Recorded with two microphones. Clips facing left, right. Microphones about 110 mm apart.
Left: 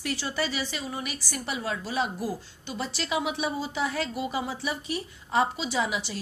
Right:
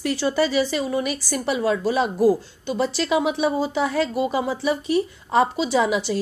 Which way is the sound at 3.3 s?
40° right (ahead or behind).